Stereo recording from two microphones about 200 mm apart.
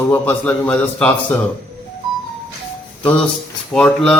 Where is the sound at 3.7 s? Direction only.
5° left (ahead or behind).